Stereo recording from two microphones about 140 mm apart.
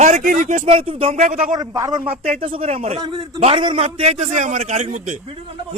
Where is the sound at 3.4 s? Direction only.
40° right (ahead or behind); by 5.2 s 65° right (ahead or behind).